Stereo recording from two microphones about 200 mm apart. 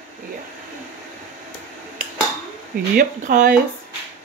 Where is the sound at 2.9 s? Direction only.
45° right (ahead or behind).